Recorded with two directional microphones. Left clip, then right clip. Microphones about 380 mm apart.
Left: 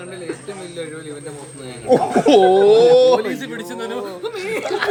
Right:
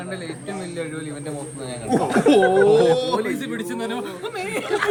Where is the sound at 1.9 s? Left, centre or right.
Left.